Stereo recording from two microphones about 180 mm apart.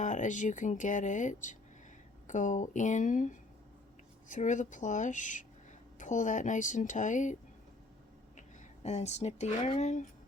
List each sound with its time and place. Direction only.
0.0 s speech: 45° left (ahead or behind)
8.4 s speech: 40° left (ahead or behind)